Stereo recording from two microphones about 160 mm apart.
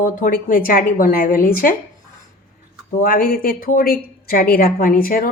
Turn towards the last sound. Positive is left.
turn(degrees=65)  # may be behind; listen again after turning